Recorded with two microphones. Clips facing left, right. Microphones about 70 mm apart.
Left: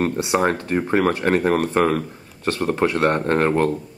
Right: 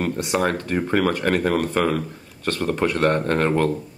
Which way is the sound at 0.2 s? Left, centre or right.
Left.